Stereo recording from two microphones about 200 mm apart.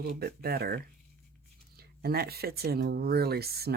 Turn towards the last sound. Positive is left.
turn(degrees=-50)  # may be behind; listen again after turning